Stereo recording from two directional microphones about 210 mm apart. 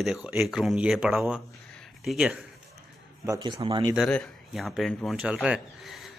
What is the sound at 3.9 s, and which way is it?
Speech, centre (ahead or behind).